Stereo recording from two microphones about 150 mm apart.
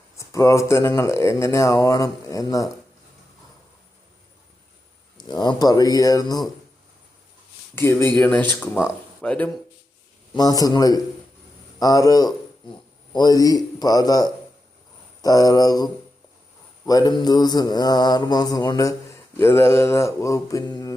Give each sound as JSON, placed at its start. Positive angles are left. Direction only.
{"t": 0.2, "sound": "speech", "side_deg": 20}
{"t": 5.1, "sound": "speech", "side_deg": 30}
{"t": 7.8, "sound": "speech", "side_deg": 15}
{"t": 10.3, "sound": "speech", "side_deg": 25}